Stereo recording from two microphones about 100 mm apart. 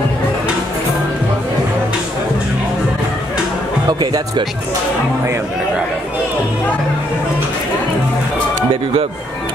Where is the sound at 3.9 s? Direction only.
45° right (ahead or behind).